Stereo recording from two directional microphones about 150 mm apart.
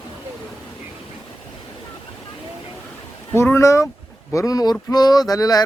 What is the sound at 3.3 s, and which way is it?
Speech, 15° left (ahead or behind).